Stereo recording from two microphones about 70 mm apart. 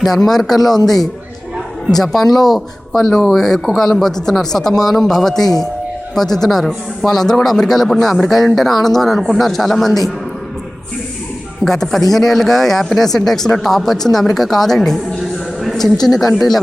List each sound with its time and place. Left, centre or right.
0.0 s a man's voice: centre
1.9 s a man's voice: centre
2.2 s speech: left
2.5 s a man's voice: centre
11.6 s a man's voice: centre
15.6 s a sound: centre
16.0 s a man's voice: centre